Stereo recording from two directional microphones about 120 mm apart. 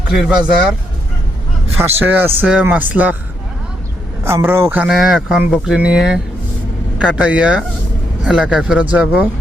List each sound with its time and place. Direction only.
0.1 s speech: 5° right (ahead or behind)
1.8 s speech: 20° right (ahead or behind)
4.2 s a man's voice: 20° right (ahead or behind)
4.9 s speech: 5° right (ahead or behind)